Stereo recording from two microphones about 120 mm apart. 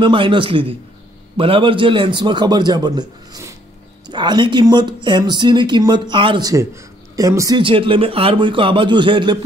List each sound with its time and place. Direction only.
0.0 s speech: 45° right (ahead or behind)
6.5 s speech: 25° right (ahead or behind)
7.6 s speech: 45° right (ahead or behind)